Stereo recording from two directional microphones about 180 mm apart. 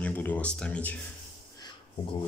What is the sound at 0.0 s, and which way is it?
Speech, 10° left (ahead or behind).